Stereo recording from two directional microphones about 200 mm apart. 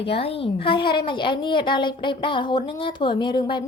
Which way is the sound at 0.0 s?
30° left (ahead or behind).